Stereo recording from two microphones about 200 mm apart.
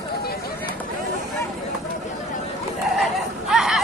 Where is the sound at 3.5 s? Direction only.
Centre (ahead or behind).